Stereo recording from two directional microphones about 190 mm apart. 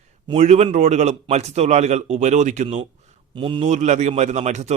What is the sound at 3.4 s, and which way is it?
Speech, 30° right (ahead or behind).